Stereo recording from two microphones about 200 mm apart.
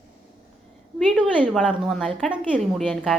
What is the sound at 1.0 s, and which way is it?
A woman's voice, 5° right (ahead or behind).